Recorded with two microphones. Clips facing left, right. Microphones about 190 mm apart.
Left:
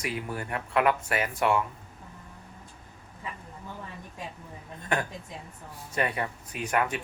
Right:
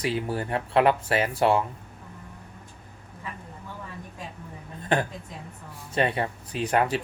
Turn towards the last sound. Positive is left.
turn(degrees=-30)  # may be behind; listen again after turning